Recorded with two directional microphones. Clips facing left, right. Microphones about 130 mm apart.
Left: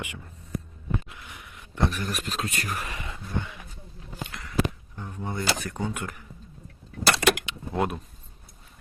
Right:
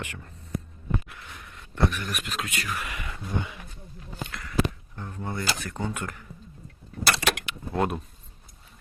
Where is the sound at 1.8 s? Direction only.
35° left (ahead or behind).